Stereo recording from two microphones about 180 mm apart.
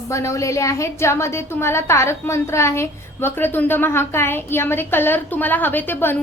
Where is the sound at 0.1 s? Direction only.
15° left (ahead or behind).